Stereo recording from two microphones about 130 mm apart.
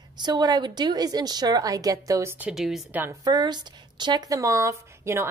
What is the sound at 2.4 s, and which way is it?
Speech, centre (ahead or behind).